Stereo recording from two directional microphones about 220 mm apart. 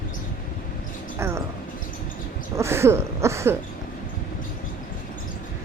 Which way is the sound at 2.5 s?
10° right (ahead or behind).